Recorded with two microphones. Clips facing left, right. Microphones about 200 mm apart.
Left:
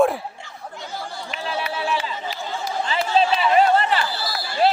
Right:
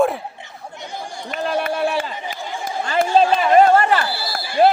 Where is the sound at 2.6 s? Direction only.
50° right (ahead or behind).